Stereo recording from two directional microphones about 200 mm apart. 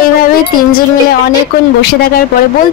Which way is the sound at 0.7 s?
45° left (ahead or behind).